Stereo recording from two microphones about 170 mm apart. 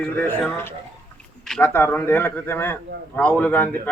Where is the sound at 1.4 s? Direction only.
5° left (ahead or behind).